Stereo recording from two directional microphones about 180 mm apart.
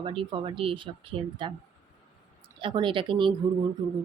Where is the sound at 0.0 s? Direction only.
30° right (ahead or behind).